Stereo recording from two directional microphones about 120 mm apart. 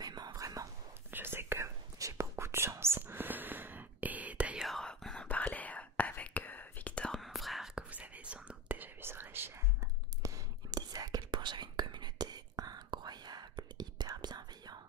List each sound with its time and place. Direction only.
0.0 s whispering: 35° right (ahead or behind)
1.1 s whispering: 20° right (ahead or behind)
4.6 s whispering: 5° left (ahead or behind); by 9.5 s 20° right (ahead or behind)
10.2 s whispering: 30° right (ahead or behind)